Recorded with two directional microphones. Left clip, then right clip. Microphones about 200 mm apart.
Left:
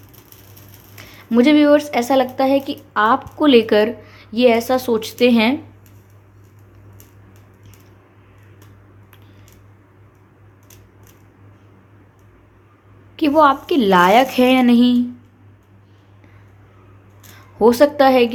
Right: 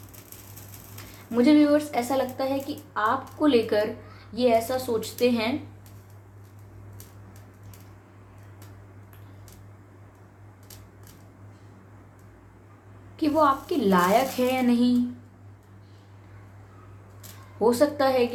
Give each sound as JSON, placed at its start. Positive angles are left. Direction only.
{"t": 1.3, "sound": "speech", "side_deg": 45}
{"t": 13.1, "sound": "speech", "side_deg": 45}
{"t": 17.6, "sound": "speech", "side_deg": 45}